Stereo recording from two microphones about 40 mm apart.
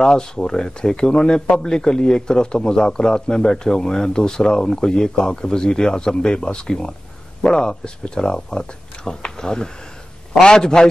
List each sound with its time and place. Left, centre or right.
0.0 s speech: centre